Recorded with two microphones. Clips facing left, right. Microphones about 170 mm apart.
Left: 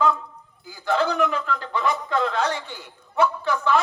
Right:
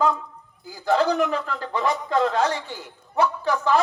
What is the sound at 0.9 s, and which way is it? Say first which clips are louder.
A man's voice: right 2 dB; 40° right (ahead or behind).